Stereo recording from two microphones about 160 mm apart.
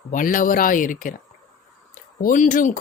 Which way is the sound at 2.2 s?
55° left (ahead or behind).